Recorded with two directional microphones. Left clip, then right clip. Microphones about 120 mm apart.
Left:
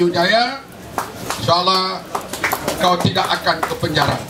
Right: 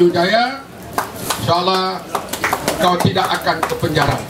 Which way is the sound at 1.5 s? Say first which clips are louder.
Left 1 dB; 35° left (ahead or behind).